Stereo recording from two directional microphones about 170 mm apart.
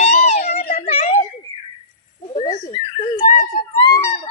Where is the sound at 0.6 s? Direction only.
65° left (ahead or behind).